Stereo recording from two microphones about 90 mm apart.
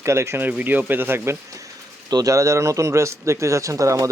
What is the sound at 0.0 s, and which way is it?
Speech, 30° right (ahead or behind).